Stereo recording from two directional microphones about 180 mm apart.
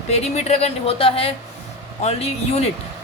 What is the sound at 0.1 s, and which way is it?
Speech, 35° left (ahead or behind).